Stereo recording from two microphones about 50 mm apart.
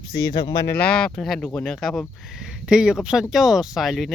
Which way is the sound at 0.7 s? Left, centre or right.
Left.